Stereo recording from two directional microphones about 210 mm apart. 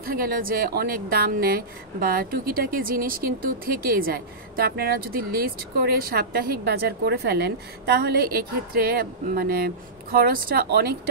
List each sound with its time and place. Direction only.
0.0 s speech: 45° right (ahead or behind)